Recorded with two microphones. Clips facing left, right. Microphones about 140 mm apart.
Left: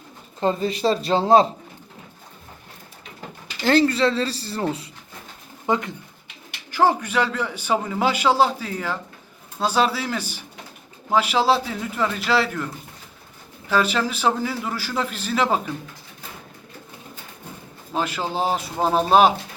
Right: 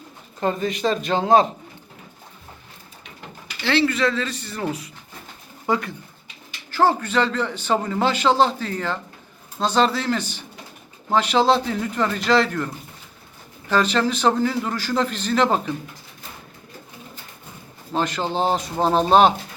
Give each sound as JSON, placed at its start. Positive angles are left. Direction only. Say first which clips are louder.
{"t": 0.3, "sound": "speech", "louder": "left 1 dB", "side_deg": 30}
{"t": 3.6, "sound": "a man's voice", "louder": "left 2 dB", "side_deg": 45}
{"t": 17.9, "sound": "a man's voice", "louder": "right 2 dB", "side_deg": 5}